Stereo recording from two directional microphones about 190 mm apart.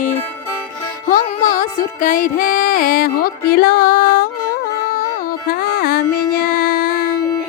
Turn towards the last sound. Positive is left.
turn(degrees=50)  # may be behind; listen again after turning